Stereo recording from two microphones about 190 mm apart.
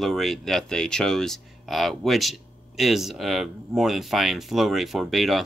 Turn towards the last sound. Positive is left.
turn(degrees=0)  # may be behind; listen again after turning